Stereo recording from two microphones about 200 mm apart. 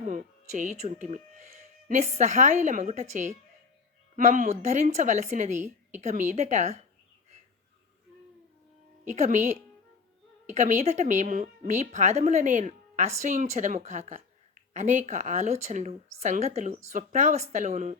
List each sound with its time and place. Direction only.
0.0 s a woman's voice: 40° right (ahead or behind)
9.1 s a woman's voice: 35° right (ahead or behind)
10.4 s a woman's voice: 35° right (ahead or behind)